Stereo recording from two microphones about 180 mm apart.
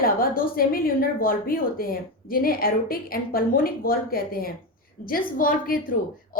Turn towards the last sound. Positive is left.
turn(degrees=50)  # may be behind; listen again after turning